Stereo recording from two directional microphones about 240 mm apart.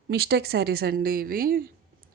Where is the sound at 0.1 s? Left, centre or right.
Right.